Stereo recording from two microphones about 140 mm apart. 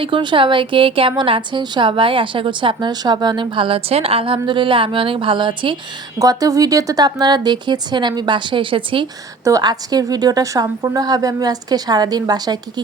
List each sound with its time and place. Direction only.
0.0 s a woman's voice: 35° right (ahead or behind)
6.1 s a woman's voice: 25° right (ahead or behind)
9.4 s a woman's voice: 25° right (ahead or behind)